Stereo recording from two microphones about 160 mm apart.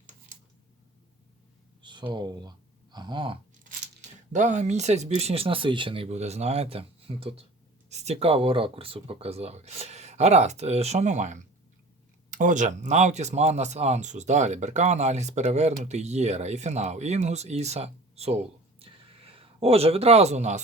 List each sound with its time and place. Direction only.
1.8 s speech: 30° right (ahead or behind)
4.3 s speech: 50° right (ahead or behind)
18.8 s a sound: 35° right (ahead or behind)